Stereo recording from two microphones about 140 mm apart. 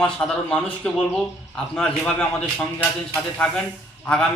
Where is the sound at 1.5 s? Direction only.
5° left (ahead or behind).